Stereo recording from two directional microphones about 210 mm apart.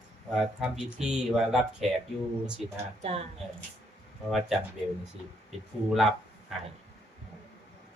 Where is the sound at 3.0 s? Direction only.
30° right (ahead or behind).